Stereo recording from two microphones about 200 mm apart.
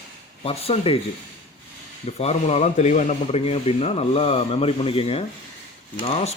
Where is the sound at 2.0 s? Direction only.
30° left (ahead or behind).